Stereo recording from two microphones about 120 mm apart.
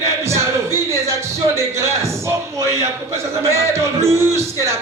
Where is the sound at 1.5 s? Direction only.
20° right (ahead or behind).